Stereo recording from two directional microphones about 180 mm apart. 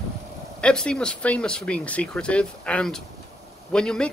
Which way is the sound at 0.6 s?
5° left (ahead or behind).